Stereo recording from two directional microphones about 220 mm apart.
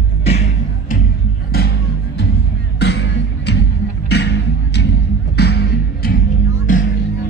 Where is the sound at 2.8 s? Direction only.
50° left (ahead or behind).